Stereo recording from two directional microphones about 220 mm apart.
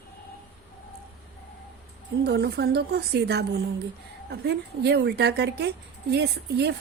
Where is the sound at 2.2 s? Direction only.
50° right (ahead or behind).